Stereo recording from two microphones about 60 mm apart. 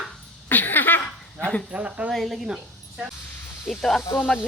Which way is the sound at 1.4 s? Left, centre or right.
Left.